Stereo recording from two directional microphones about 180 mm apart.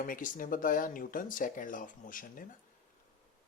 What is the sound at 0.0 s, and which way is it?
Speech, 50° left (ahead or behind).